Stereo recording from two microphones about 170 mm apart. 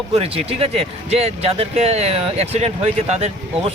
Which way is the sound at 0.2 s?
35° right (ahead or behind).